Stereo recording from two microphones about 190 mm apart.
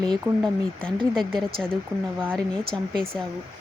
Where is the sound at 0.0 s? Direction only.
5° left (ahead or behind).